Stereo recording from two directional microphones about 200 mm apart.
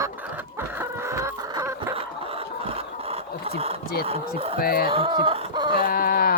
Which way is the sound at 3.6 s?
30° right (ahead or behind).